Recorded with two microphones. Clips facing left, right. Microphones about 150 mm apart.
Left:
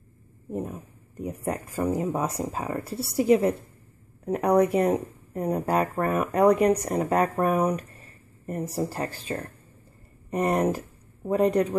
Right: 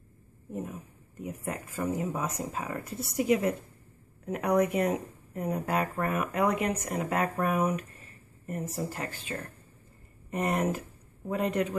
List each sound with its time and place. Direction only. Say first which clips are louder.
0.5 s speech: left 5 dB; 35° left (ahead or behind)